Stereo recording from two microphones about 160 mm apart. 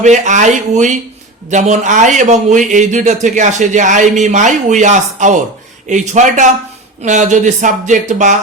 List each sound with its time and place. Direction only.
0.0 s a man's voice: 50° right (ahead or behind)